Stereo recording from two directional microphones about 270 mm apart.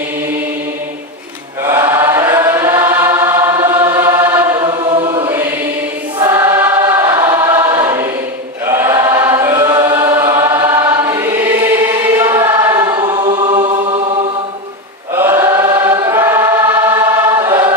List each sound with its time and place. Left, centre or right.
1.6 s chant: centre
6.1 s choir: centre